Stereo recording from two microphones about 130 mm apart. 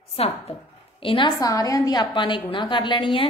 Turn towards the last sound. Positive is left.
turn(degrees=40)  # may be behind; listen again after turning